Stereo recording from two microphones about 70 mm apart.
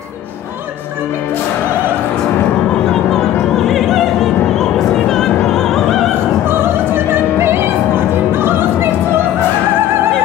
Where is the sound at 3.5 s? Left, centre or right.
Centre.